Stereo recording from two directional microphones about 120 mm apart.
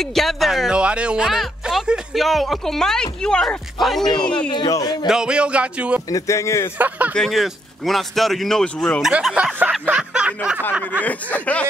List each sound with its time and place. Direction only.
0.0 s speech: centre (ahead or behind)
4.5 s a man's voice: 35° left (ahead or behind)
5.0 s speech: 5° right (ahead or behind)
6.0 s speech: 30° left (ahead or behind)
7.2 s speech: centre (ahead or behind)
9.0 s speech: 5° right (ahead or behind)
10.8 s speech: 15° left (ahead or behind)